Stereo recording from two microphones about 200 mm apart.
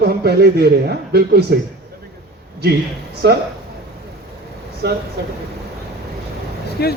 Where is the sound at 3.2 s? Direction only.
55° right (ahead or behind).